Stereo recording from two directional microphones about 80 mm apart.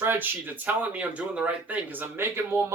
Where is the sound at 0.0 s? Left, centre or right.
Right.